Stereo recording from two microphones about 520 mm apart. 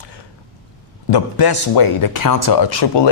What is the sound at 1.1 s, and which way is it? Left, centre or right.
Speech, left.